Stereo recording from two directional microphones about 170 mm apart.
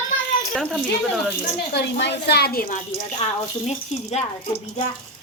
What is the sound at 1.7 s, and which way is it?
A woman's voice, 75° left (ahead or behind).